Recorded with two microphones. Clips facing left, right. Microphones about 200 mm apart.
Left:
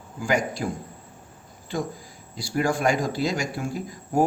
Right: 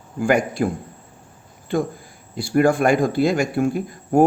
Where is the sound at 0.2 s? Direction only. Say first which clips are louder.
Right 6 dB; 55° right (ahead or behind).